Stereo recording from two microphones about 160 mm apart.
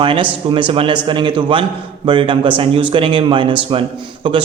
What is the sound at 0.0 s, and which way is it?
A man's voice, 30° right (ahead or behind).